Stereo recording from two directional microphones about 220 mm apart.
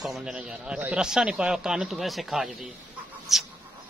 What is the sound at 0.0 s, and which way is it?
A man's voice, centre (ahead or behind).